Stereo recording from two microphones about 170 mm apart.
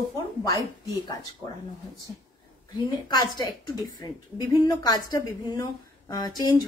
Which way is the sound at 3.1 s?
25° left (ahead or behind).